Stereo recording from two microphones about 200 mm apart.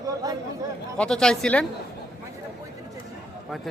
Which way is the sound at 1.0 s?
5° left (ahead or behind).